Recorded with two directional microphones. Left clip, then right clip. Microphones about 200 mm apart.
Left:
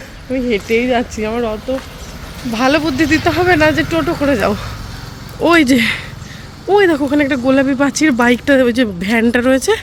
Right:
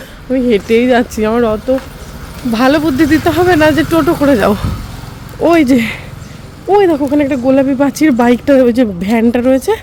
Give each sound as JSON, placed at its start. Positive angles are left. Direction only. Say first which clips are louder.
{"t": 0.3, "sound": "speech", "louder": "right 5 dB", "side_deg": -30}
{"t": 2.5, "sound": "speech", "louder": "right 3 dB", "side_deg": -25}
{"t": 5.4, "sound": "speech", "louder": "right 1 dB", "side_deg": -5}